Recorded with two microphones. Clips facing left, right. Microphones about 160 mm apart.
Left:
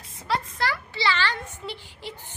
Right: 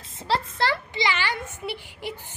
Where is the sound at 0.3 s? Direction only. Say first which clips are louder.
Right 2 dB; 30° right (ahead or behind).